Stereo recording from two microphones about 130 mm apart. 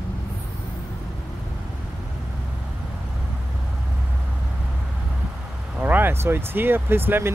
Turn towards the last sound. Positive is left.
turn(degrees=-15)  # may be behind; listen again after turning